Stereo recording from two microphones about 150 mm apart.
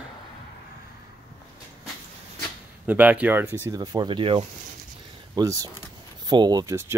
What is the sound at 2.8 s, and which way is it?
Speech, 10° right (ahead or behind).